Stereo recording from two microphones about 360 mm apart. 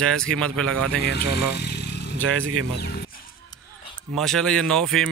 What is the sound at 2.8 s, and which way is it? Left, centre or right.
Speech, left.